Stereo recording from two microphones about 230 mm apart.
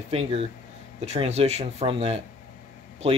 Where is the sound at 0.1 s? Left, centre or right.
Right.